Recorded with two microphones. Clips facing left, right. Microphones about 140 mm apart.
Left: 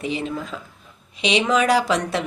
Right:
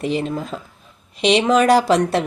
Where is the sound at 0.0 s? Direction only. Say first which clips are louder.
Right 4 dB; 45° right (ahead or behind).